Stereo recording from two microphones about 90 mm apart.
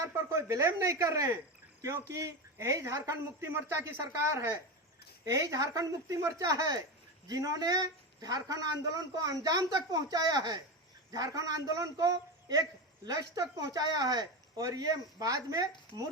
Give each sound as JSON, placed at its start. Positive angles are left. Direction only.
{"t": 0.0, "sound": "a woman's voice", "side_deg": -35}
{"t": 5.2, "sound": "a woman's voice", "side_deg": -35}